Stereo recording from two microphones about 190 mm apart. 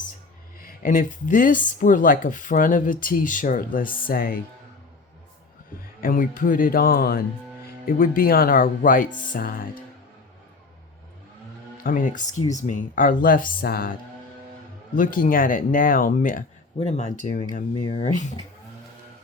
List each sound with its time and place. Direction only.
0.6 s speech: 50° left (ahead or behind)
6.0 s speech: 45° left (ahead or behind)
11.8 s speech: 45° left (ahead or behind)
14.9 s speech: 45° left (ahead or behind)